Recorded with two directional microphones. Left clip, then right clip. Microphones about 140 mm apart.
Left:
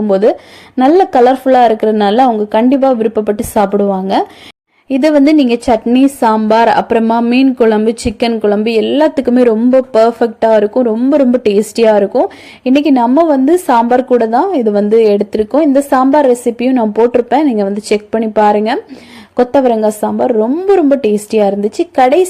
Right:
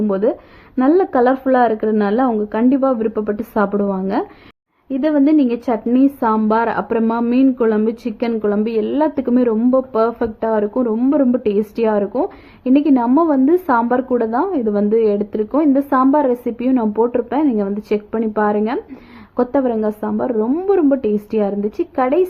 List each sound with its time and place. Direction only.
0.1 s speech: 25° left (ahead or behind)
4.9 s a woman's voice: 40° left (ahead or behind)